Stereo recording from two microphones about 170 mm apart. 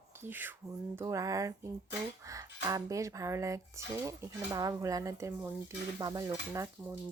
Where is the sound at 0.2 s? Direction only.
10° right (ahead or behind).